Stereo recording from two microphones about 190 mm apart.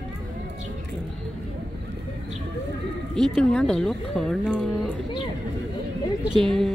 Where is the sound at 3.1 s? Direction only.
Centre (ahead or behind).